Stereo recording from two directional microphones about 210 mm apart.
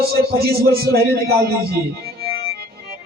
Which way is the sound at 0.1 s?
50° right (ahead or behind).